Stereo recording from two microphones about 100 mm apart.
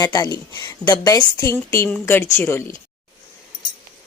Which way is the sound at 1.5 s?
25° left (ahead or behind).